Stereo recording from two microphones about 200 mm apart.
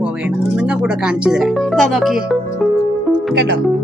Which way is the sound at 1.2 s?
Centre (ahead or behind).